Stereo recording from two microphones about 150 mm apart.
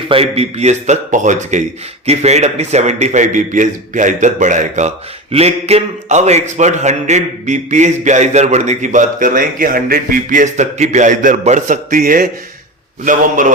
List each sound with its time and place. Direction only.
0.1 s a man's voice: 40° right (ahead or behind)
5.3 s a man's voice: 45° right (ahead or behind); by 13.5 s 60° right (ahead or behind)